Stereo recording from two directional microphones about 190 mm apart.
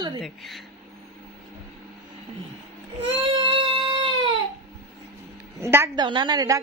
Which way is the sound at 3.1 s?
30° right (ahead or behind).